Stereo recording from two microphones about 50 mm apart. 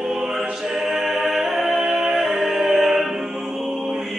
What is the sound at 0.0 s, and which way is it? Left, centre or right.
Music, centre.